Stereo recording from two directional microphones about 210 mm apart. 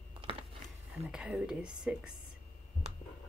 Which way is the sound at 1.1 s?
5° right (ahead or behind).